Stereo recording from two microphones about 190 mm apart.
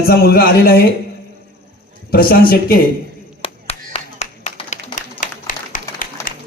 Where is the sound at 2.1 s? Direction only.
50° left (ahead or behind).